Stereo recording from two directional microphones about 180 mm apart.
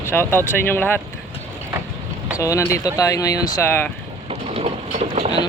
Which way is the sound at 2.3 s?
15° left (ahead or behind).